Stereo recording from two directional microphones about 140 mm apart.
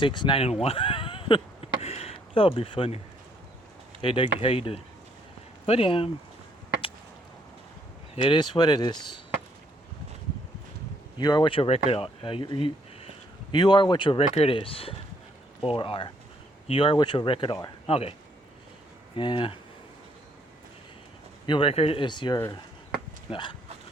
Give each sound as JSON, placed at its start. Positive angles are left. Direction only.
{"t": 0.0, "sound": "speech", "side_deg": 35}
{"t": 4.0, "sound": "speech", "side_deg": 40}
{"t": 8.1, "sound": "speech", "side_deg": 40}
{"t": 11.2, "sound": "speech", "side_deg": 30}
{"t": 19.1, "sound": "speech", "side_deg": 35}
{"t": 21.4, "sound": "speech", "side_deg": 35}